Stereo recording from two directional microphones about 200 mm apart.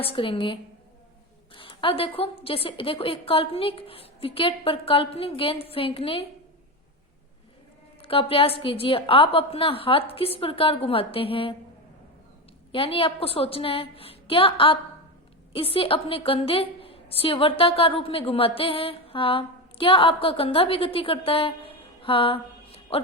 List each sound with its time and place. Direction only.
0.0 s a woman's voice: 25° left (ahead or behind)
8.0 s a woman's voice: 25° left (ahead or behind)
12.7 s a woman's voice: 25° left (ahead or behind)